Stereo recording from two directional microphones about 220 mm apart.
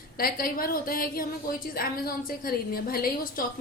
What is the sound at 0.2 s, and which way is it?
A woman's voice, 40° left (ahead or behind).